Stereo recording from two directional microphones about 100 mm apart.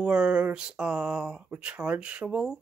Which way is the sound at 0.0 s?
10° right (ahead or behind).